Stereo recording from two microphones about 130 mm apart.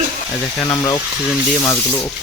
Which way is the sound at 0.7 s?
25° left (ahead or behind).